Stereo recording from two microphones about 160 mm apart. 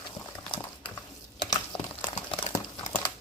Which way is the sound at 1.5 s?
25° left (ahead or behind).